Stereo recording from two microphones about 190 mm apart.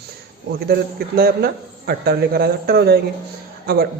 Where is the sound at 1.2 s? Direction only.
55° right (ahead or behind).